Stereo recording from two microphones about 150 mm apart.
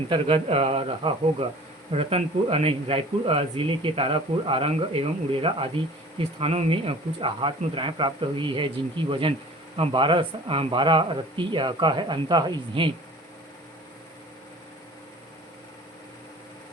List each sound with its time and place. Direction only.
0.1 s speech: 40° right (ahead or behind)